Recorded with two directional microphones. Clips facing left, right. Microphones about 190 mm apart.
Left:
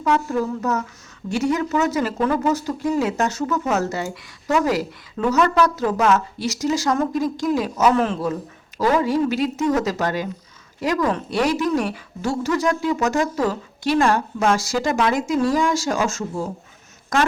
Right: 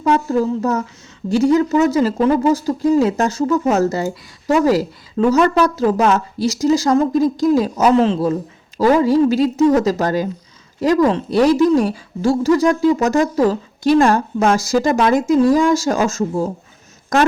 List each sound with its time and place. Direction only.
0.0 s a woman's voice: 30° right (ahead or behind)